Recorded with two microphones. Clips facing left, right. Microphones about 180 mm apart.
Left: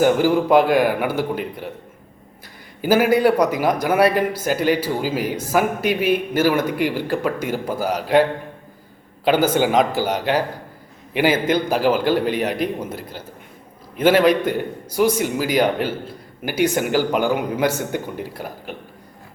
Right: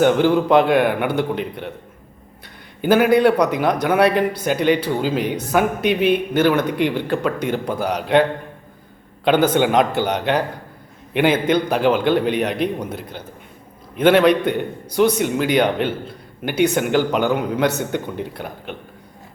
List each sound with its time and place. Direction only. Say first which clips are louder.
0.0 s a man's voice: right 1 dB; 5° left (ahead or behind)
2.8 s a man's voice: right 2 dB; 5° left (ahead or behind)